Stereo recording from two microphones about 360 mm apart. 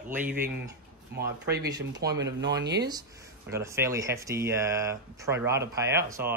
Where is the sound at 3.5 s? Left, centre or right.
Centre.